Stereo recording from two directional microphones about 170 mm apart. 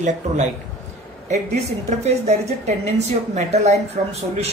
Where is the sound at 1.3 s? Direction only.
40° right (ahead or behind).